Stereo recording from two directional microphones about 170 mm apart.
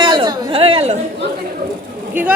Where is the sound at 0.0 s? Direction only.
25° right (ahead or behind).